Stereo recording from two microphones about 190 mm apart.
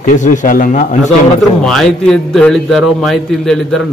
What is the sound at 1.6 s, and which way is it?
A man's voice, 5° left (ahead or behind).